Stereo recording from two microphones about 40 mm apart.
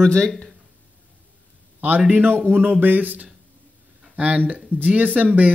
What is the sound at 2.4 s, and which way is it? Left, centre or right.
Speech, right.